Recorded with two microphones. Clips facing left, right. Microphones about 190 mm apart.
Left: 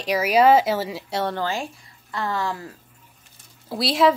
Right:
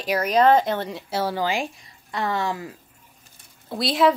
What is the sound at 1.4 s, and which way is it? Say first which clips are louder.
A woman's voice: right 2 dB; 15° right (ahead or behind).